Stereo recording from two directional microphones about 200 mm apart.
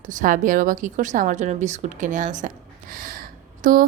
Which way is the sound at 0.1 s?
40° right (ahead or behind).